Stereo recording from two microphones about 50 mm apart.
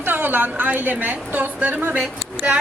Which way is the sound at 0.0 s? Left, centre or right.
Right.